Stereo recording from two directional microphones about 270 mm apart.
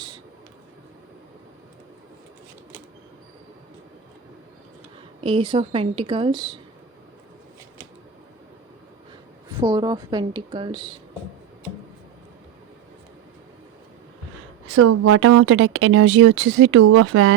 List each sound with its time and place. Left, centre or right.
5.2 s a woman's voice: centre
9.6 s a woman's voice: centre
14.8 s speech: right